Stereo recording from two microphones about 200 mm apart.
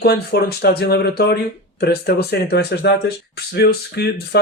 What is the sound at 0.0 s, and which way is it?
Speech, 50° left (ahead or behind).